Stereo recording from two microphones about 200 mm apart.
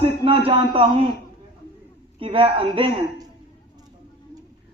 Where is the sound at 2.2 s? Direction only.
25° right (ahead or behind).